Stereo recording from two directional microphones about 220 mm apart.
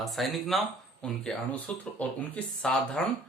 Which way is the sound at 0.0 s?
Centre (ahead or behind).